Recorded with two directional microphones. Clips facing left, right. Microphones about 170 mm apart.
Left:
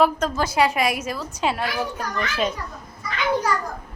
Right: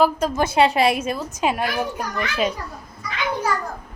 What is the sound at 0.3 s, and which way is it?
A child's voice, 25° right (ahead or behind).